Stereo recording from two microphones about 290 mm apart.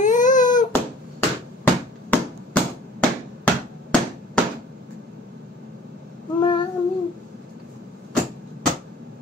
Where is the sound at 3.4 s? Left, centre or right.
Centre.